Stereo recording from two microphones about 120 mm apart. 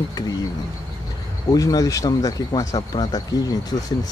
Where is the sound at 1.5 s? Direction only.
30° left (ahead or behind).